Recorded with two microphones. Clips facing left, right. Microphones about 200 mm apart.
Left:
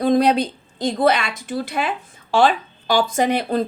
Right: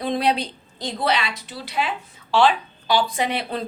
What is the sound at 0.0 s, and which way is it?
A woman's voice, 45° left (ahead or behind).